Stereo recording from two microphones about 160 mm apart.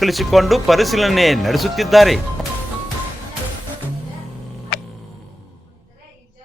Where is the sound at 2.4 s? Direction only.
5° left (ahead or behind).